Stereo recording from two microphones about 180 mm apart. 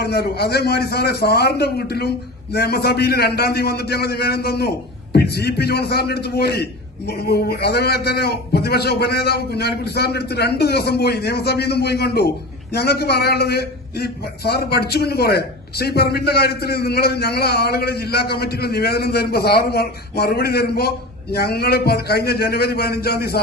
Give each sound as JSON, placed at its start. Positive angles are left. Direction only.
{"t": 0.0, "sound": "a man's voice", "side_deg": 65}